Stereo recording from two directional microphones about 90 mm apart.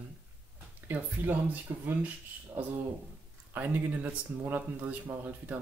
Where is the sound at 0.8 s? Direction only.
20° right (ahead or behind).